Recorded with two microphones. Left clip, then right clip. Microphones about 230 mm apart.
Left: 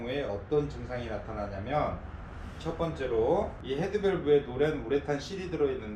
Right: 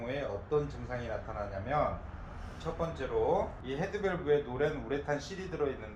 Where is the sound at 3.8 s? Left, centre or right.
Centre.